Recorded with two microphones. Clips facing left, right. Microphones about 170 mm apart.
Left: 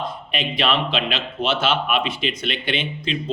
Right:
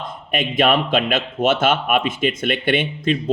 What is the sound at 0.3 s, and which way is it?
Speech, 50° right (ahead or behind).